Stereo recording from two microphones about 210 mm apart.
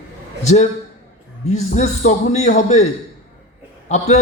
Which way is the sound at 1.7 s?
35° left (ahead or behind).